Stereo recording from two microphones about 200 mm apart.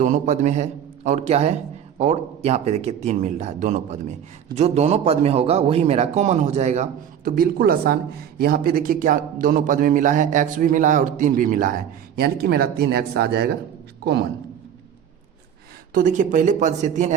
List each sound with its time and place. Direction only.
0.0 s a man's voice: 40° right (ahead or behind)
7.3 s a man's voice: 45° right (ahead or behind)
15.9 s a man's voice: 40° right (ahead or behind)